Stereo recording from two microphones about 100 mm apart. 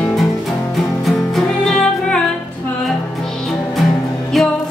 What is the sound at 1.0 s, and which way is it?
Music, 5° left (ahead or behind).